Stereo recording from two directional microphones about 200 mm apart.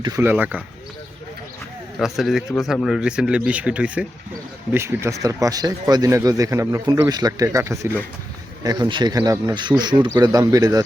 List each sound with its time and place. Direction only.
0.2 s speech: 10° right (ahead or behind)
2.0 s speech: centre (ahead or behind); by 10.8 s 20° right (ahead or behind)